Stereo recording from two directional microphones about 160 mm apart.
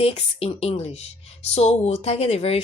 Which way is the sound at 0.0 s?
35° left (ahead or behind).